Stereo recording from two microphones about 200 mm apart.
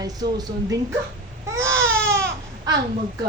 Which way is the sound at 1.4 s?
15° right (ahead or behind).